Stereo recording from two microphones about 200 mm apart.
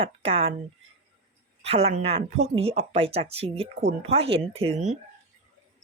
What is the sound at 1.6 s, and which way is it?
Speech, 30° right (ahead or behind).